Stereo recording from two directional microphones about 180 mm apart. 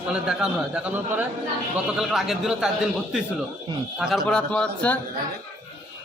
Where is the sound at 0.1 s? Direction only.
5° right (ahead or behind).